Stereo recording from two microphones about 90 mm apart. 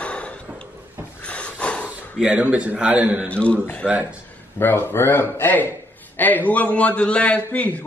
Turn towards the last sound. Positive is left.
turn(degrees=15)  # may be behind; listen again after turning